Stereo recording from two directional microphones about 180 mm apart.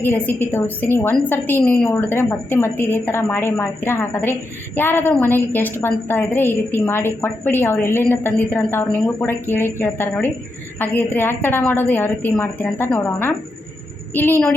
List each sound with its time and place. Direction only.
0.0 s a woman's voice: 10° left (ahead or behind)